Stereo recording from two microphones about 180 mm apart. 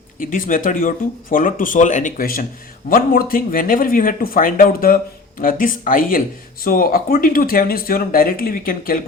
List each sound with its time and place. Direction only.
0.2 s speech: 50° left (ahead or behind)